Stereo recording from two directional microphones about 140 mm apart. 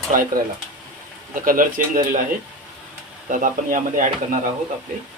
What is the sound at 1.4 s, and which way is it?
Speech, 80° right.